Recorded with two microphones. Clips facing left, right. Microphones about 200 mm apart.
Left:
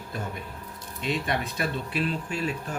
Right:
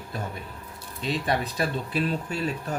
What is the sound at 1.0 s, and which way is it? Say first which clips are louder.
Speech: right 2 dB; 35° right (ahead or behind).